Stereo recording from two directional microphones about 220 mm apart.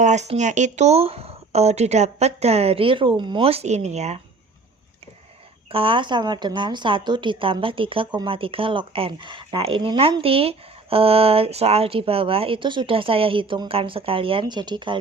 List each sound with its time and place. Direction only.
0.0 s speech: 30° right (ahead or behind)
5.7 s speech: 25° right (ahead or behind)